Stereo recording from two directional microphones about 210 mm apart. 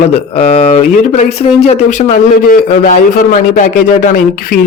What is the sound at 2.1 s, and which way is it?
A man's voice, 40° left (ahead or behind).